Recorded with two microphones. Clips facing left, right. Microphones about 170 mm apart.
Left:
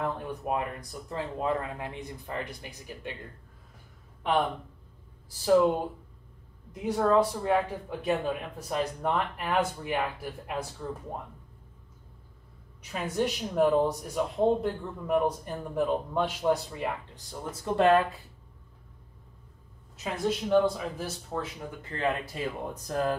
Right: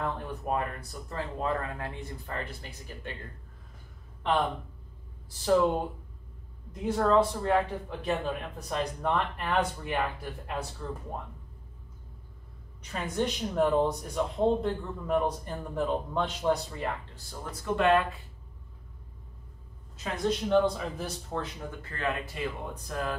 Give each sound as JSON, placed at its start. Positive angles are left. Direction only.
{"t": 0.0, "sound": "speech", "side_deg": 10}
{"t": 6.7, "sound": "speech", "side_deg": 10}
{"t": 12.9, "sound": "speech", "side_deg": 5}
{"t": 20.0, "sound": "a man's voice", "side_deg": 5}
{"t": 21.9, "sound": "speech", "side_deg": 25}
{"t": 22.8, "sound": "speech", "side_deg": 40}